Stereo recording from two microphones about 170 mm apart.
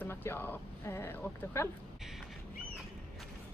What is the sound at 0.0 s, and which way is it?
Speech, 15° left (ahead or behind).